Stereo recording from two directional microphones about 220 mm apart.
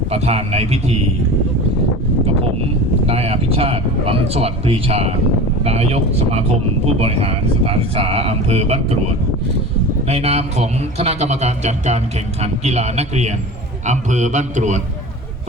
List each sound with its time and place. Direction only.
0.1 s speech: 30° right (ahead or behind)
3.1 s speech: 25° right (ahead or behind)